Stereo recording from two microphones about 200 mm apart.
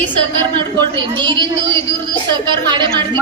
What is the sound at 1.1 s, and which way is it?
A man's voice, 20° right (ahead or behind).